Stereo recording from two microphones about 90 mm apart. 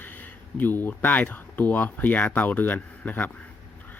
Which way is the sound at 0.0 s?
20° left (ahead or behind).